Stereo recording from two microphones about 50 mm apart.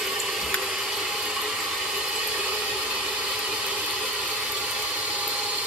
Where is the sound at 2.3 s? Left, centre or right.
Right.